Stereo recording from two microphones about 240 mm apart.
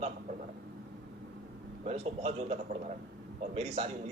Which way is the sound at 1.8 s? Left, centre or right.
Right.